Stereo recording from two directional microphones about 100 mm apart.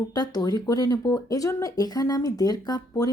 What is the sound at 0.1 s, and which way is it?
Speech, 40° left (ahead or behind).